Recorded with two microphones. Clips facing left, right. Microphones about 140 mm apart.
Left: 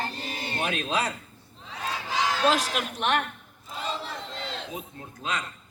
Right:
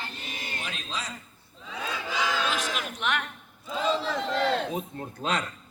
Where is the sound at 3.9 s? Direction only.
90° right; by 4.7 s 65° right (ahead or behind).